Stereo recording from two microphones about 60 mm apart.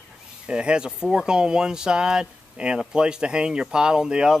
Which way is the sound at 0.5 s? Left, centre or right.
Centre.